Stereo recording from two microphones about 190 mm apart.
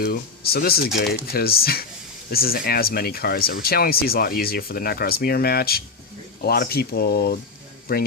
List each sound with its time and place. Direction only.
0.0 s speech: 55° left (ahead or behind)